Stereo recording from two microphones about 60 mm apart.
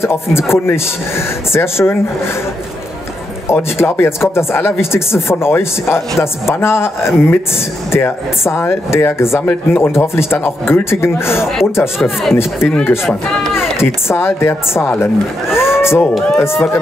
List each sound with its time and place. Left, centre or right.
0.0 s speech: left
3.7 s speech: left
12.0 s speech: centre
13.1 s speech: centre
13.6 s speech: left
15.5 s a sound: left
16.3 s speech: left